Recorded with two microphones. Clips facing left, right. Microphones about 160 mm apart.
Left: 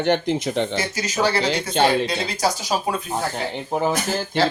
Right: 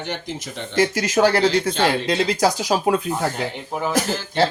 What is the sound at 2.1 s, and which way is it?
Speech, 90° right.